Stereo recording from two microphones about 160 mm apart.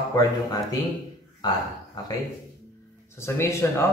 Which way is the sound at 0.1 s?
25° left (ahead or behind).